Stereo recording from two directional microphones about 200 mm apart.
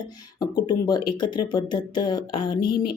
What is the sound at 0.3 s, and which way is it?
Speech, 20° left (ahead or behind).